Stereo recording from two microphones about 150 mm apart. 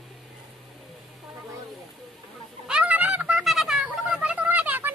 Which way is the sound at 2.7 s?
10° right (ahead or behind).